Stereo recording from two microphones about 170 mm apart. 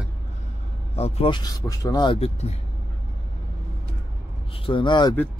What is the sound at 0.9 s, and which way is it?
Speech, 40° left (ahead or behind).